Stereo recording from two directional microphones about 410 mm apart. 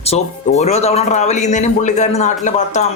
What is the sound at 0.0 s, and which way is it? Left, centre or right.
Speech, centre.